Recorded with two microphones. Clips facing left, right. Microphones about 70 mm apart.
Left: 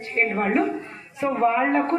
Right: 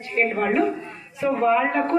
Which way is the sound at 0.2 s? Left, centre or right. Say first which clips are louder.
Right 1 dB; left.